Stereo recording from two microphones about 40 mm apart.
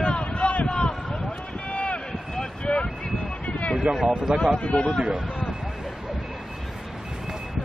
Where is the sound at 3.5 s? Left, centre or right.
Left.